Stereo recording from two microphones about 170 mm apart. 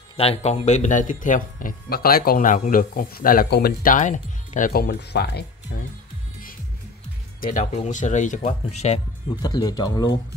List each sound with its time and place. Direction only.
0.2 s speech: 40° left (ahead or behind); by 5.4 s 70° left (ahead or behind)
7.3 s speech: 55° left (ahead or behind)
7.7 s speech: 45° left (ahead or behind)
9.4 s speech: 20° left (ahead or behind)